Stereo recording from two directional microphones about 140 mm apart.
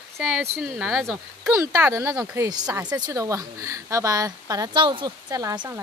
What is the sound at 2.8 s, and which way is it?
A woman's voice, 30° right (ahead or behind).